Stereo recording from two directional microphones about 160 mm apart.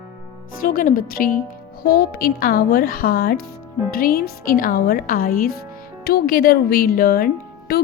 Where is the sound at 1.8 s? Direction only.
80° left.